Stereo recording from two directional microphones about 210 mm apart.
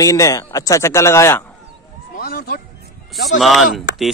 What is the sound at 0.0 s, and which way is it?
Speech, 15° left (ahead or behind).